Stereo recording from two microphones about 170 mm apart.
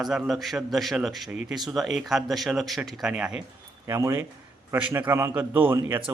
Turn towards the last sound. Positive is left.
turn(degrees=-10)  # may be behind; listen again after turning